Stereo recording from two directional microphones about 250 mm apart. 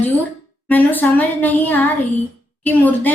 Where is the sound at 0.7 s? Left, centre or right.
Centre.